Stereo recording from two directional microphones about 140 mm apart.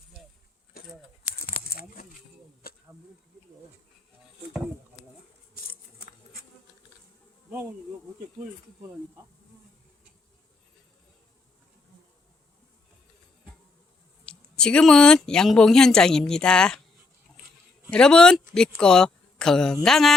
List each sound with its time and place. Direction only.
2.6 s insect: 90° left
14.3 s speech: 5° left (ahead or behind)
17.9 s speech: 5° left (ahead or behind)